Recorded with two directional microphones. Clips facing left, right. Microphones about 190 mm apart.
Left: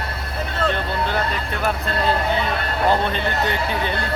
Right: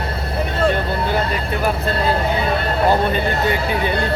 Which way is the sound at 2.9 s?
10° right (ahead or behind).